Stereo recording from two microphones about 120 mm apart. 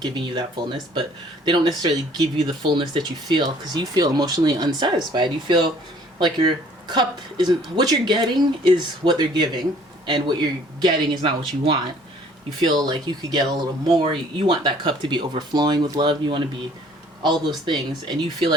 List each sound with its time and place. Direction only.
0.0 s speech: 40° right (ahead or behind)
17.7 s speech: 40° right (ahead or behind)